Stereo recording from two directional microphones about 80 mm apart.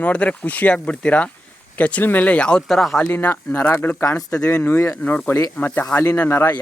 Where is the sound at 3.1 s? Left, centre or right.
Left.